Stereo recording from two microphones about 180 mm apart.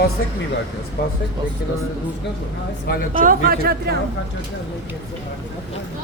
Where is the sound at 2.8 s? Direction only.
60° left (ahead or behind).